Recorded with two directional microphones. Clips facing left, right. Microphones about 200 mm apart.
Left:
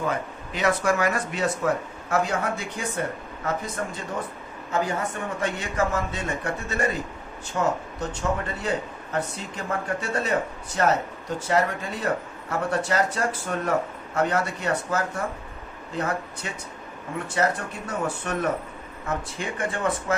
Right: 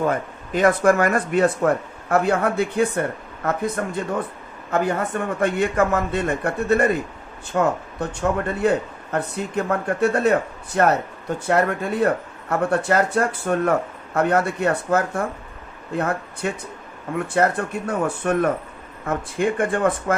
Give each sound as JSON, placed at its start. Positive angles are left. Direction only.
{"t": 0.1, "sound": "speech", "side_deg": -50}